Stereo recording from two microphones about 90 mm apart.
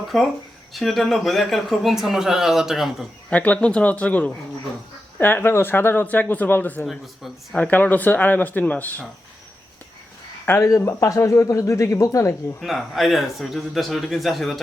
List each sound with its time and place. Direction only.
0.1 s speech: centre (ahead or behind)
3.2 s speech: 15° left (ahead or behind)
6.8 s speech: centre (ahead or behind)
7.5 s speech: 20° left (ahead or behind)
10.4 s speech: 25° left (ahead or behind)
12.5 s speech: centre (ahead or behind)